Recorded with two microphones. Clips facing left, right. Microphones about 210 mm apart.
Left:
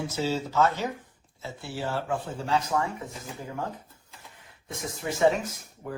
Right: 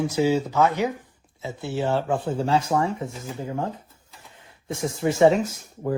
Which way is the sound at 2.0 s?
30° right (ahead or behind).